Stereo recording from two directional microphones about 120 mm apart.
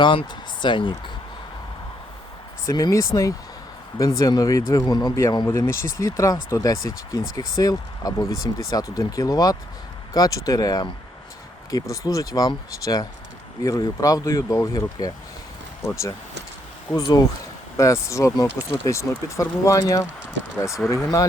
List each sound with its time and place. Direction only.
0.0 s speech: 40° left (ahead or behind)
2.6 s speech: 30° left (ahead or behind)
5.5 s speech: 20° left (ahead or behind)
16.9 s speech: 30° left (ahead or behind)